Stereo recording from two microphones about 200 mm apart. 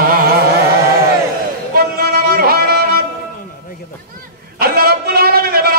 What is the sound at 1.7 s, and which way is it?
Music, 50° right (ahead or behind).